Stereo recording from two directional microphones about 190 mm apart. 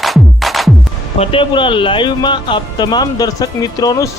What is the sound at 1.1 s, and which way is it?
Speech, 25° left (ahead or behind).